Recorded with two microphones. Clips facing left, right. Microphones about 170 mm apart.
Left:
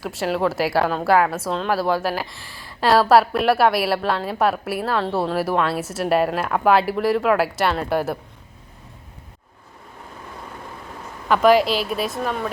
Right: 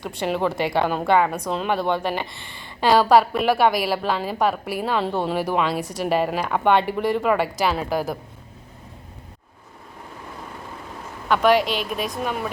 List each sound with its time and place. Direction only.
0.0 s a woman's voice: 5° left (ahead or behind)
11.3 s a woman's voice: centre (ahead or behind)
11.6 s speech: 35° left (ahead or behind)
11.9 s a woman's voice: 5° left (ahead or behind)